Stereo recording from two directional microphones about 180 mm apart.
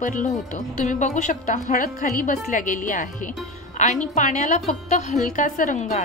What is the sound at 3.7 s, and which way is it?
Music, 40° left (ahead or behind).